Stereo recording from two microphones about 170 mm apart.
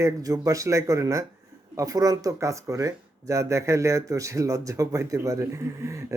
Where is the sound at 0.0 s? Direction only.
20° right (ahead or behind).